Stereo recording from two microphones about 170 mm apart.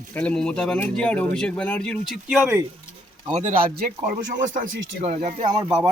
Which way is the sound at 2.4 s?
15° right (ahead or behind).